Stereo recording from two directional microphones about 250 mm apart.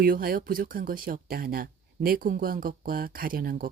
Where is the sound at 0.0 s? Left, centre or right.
Right.